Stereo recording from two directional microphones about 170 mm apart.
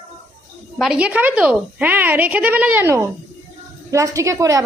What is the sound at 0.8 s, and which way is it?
A woman's voice, 5° right (ahead or behind).